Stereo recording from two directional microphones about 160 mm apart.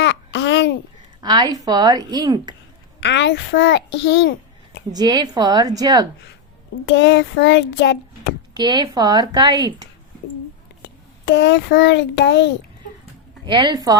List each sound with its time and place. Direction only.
0.0 s babbling: 90° left
1.2 s a woman's voice: 25° right (ahead or behind)
3.2 s a child's voice: 90° left
4.9 s a woman's voice: 25° right (ahead or behind)
6.8 s a child's voice: 90° left
8.5 s a woman's voice: 25° right (ahead or behind)
10.8 s a child's voice: 90° left
13.4 s a woman's voice: 30° right (ahead or behind)